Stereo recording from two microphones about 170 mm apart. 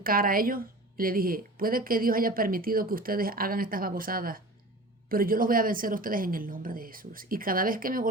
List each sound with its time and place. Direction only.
0.0 s a woman's voice: 60° right (ahead or behind)